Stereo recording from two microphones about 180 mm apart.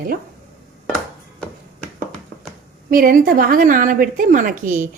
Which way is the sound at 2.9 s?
50° right (ahead or behind).